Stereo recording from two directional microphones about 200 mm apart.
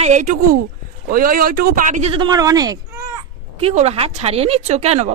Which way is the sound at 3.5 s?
30° right (ahead or behind).